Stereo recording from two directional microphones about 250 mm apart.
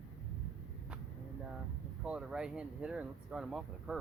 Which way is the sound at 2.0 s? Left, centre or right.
Centre.